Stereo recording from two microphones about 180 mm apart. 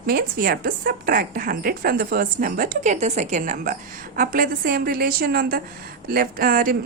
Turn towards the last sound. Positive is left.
turn(degrees=-50)  # may be behind; listen again after turning